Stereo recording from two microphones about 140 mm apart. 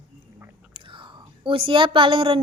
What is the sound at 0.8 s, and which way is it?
Whispering, 35° right (ahead or behind).